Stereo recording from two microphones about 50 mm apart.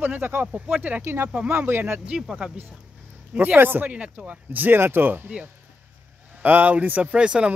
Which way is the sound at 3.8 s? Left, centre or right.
Right.